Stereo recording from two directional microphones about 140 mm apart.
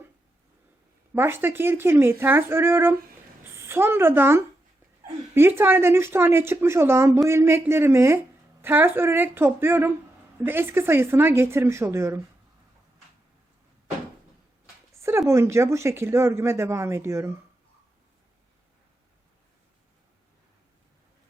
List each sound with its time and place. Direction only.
1.1 s a woman's voice: 15° right (ahead or behind)
15.3 s speech: 20° right (ahead or behind)